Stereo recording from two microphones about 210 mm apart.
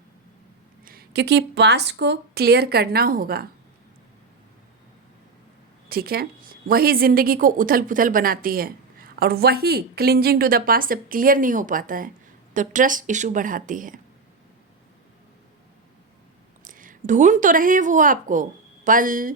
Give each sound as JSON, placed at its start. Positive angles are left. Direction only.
{"t": 0.9, "sound": "a woman's voice", "side_deg": -50}
{"t": 5.9, "sound": "a woman's voice", "side_deg": -45}
{"t": 16.6, "sound": "a woman's voice", "side_deg": -40}